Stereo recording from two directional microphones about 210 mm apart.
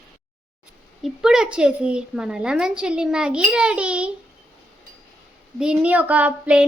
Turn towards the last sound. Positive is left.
turn(degrees=-5)  # may be behind; listen again after turning